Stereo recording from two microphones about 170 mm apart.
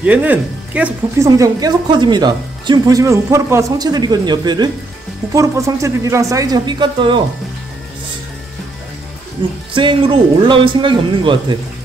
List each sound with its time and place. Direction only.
0.0 s speech: 10° right (ahead or behind)
1.4 s speech: 25° right (ahead or behind)
9.8 s speech: 30° right (ahead or behind)